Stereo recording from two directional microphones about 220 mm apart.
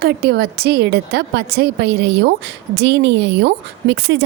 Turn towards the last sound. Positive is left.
turn(degrees=-50)  # may be behind; listen again after turning